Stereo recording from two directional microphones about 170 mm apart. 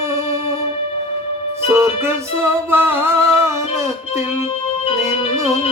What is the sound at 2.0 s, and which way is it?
Music, 15° right (ahead or behind).